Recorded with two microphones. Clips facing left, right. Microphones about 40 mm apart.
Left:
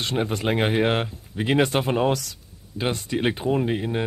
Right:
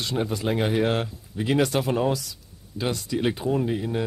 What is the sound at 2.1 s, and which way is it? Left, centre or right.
Speech, left.